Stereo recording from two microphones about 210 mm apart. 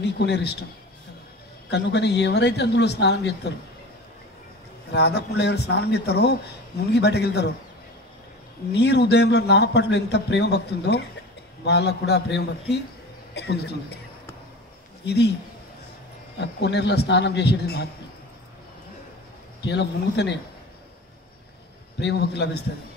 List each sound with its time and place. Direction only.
0.0 s a man's voice: 55° left (ahead or behind)
1.7 s a man's voice: 55° left (ahead or behind)
4.9 s a man's voice: 50° left (ahead or behind)
8.7 s a man's voice: 55° left (ahead or behind)
15.0 s a man's voice: 50° left (ahead or behind)
16.3 s a man's voice: 55° left (ahead or behind)
19.6 s a man's voice: 55° left (ahead or behind)
22.0 s a man's voice: 55° left (ahead or behind)